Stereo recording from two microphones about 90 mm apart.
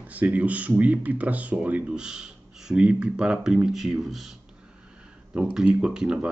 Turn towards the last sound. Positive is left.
turn(degrees=-10)  # may be behind; listen again after turning